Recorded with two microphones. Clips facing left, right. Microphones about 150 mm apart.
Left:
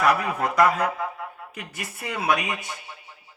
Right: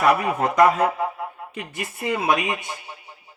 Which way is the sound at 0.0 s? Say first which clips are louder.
Right 3 dB; 25° right (ahead or behind).